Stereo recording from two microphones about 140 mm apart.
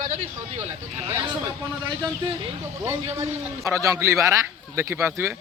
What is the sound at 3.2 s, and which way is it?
Speech, 20° right (ahead or behind).